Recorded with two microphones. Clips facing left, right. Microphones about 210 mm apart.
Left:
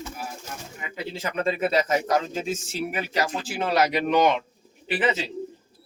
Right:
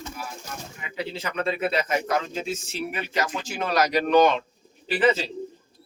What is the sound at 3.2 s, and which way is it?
A man's voice, 30° left (ahead or behind).